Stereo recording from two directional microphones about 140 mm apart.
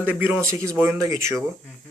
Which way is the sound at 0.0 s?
15° right (ahead or behind).